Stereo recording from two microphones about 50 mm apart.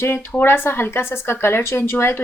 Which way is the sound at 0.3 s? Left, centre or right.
Left.